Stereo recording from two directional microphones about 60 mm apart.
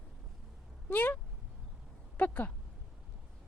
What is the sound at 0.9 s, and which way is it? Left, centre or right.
A woman's voice, left.